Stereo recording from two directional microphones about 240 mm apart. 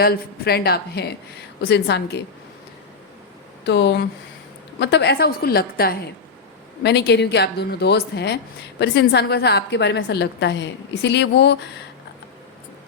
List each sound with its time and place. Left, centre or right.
0.0 s a woman's voice: left
3.6 s a woman's voice: left